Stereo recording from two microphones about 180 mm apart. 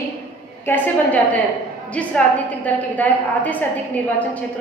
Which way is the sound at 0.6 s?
10° left (ahead or behind).